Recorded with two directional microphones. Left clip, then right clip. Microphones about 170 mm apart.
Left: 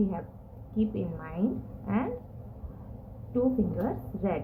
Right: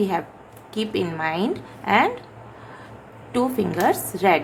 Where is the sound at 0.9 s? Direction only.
75° right (ahead or behind).